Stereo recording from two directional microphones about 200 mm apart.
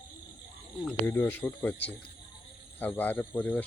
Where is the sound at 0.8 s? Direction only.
10° left (ahead or behind).